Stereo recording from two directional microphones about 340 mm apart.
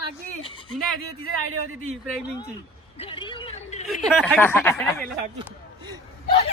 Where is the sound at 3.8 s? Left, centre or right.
Centre.